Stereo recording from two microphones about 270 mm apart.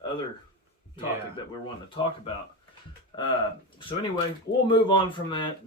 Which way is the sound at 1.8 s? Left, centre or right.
Centre.